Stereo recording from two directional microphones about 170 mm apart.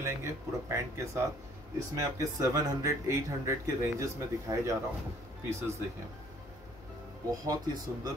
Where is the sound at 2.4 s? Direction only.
20° right (ahead or behind).